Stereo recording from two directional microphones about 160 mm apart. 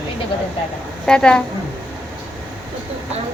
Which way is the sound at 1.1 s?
5° left (ahead or behind).